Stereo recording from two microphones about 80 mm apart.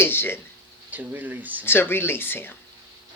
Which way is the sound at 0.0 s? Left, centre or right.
Left.